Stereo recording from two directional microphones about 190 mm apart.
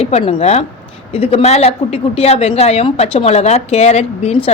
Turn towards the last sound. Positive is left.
turn(degrees=35)  # may be behind; listen again after turning